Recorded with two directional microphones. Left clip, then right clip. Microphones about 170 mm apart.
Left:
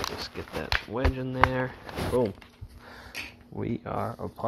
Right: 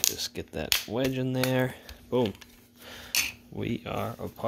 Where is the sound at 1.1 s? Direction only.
60° right (ahead or behind).